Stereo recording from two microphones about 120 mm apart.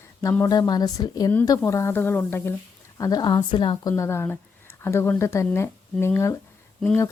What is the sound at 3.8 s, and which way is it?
Speech, 25° left (ahead or behind).